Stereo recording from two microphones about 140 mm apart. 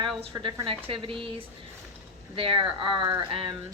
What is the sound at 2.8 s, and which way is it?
Speech, 35° right (ahead or behind).